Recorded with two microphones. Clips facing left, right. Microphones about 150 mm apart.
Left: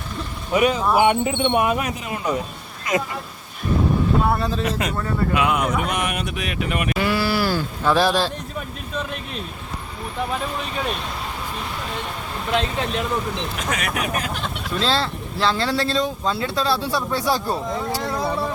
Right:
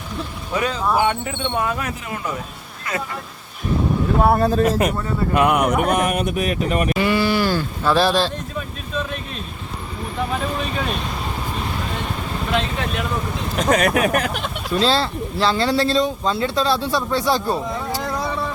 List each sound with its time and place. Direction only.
0.5 s speech: 15° left (ahead or behind)
4.2 s speech: 50° right (ahead or behind)
6.9 s speech: centre (ahead or behind)
13.6 s speech: 40° right (ahead or behind)
14.1 s speech: 60° right (ahead or behind)
14.8 s speech: centre (ahead or behind)